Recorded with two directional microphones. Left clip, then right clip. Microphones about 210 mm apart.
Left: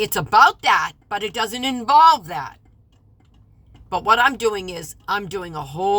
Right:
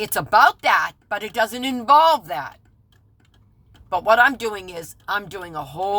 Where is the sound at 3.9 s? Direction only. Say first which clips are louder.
Right 1 dB; centre (ahead or behind).